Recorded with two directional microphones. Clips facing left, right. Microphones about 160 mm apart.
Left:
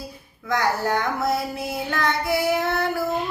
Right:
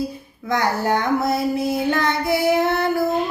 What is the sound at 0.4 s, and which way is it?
Child singing, 20° right (ahead or behind).